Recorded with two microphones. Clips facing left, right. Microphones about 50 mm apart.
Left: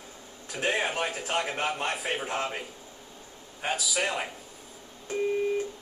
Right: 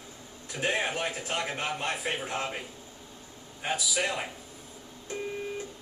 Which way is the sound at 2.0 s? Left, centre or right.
Left.